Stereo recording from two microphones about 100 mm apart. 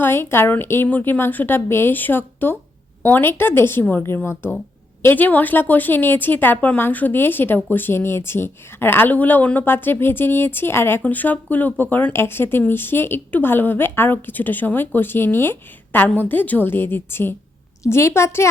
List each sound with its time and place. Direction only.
0.0 s a woman's voice: 25° left (ahead or behind)